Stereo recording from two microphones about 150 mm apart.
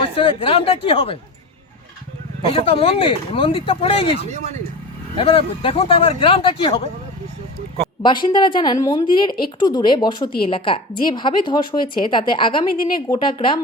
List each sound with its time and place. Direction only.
0.2 s speech: 35° left (ahead or behind)
2.5 s speech: 40° left (ahead or behind)
4.3 s speech: 50° right (ahead or behind)
5.1 s speech: 35° left (ahead or behind)
8.0 s speech: 30° left (ahead or behind)